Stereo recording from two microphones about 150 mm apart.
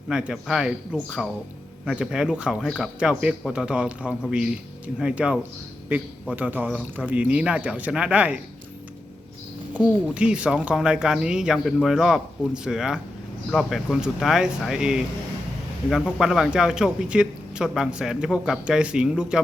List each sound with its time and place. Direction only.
0.1 s speech: 5° right (ahead or behind)
9.7 s speech: 10° right (ahead or behind)